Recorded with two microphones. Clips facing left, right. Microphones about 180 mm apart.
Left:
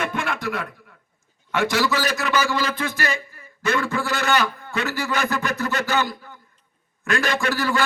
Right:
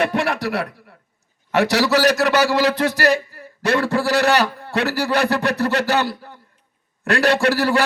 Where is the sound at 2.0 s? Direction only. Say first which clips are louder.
Right 7 dB; 40° right (ahead or behind).